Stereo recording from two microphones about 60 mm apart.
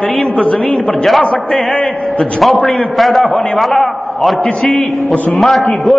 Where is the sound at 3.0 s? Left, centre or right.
Centre.